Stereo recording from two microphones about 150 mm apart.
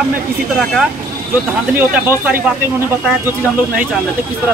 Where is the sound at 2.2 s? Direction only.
15° right (ahead or behind).